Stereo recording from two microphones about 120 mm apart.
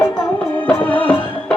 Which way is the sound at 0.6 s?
15° left (ahead or behind).